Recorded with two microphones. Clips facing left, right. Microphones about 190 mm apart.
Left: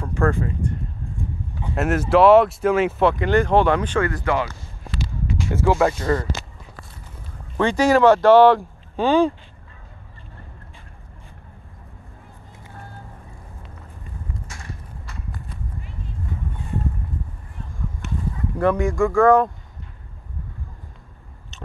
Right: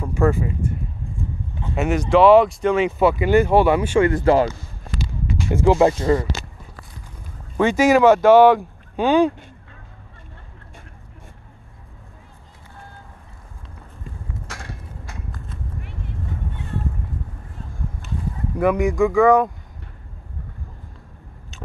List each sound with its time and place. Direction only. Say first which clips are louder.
0.0 s speech: right 2 dB; 10° right (ahead or behind)
1.8 s speech: right 1 dB; 5° left (ahead or behind)
4.0 s speech: right 6 dB; 25° right (ahead or behind)
5.5 s speech: right 3 dB; 15° right (ahead or behind)
7.5 s speech: right 2 dB; 20° right (ahead or behind)
15.8 s a sound: right 1 dB; 65° right (ahead or behind)
18.0 s clip-clop: left 2 dB; 75° left (ahead or behind)
18.6 s speech: right 1 dB; 15° right (ahead or behind)
18.9 s speech: even; centre (ahead or behind)